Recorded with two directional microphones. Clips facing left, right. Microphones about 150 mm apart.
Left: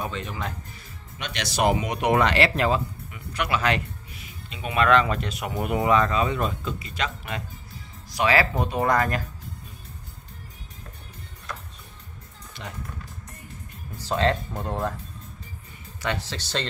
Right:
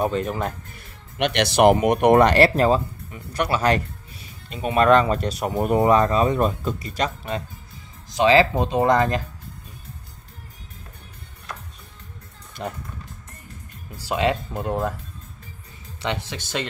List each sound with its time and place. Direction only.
0.0 s speech: 45° right (ahead or behind)
1.1 s speech: 65° right (ahead or behind); by 7.4 s 35° right (ahead or behind)
8.1 s speech: 20° right (ahead or behind)
12.6 s speech: 45° right (ahead or behind)
13.9 s speech: 10° right (ahead or behind)
16.0 s speech: 20° right (ahead or behind)